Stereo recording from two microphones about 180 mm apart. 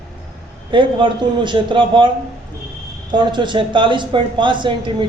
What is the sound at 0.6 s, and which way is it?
Speech, 25° right (ahead or behind).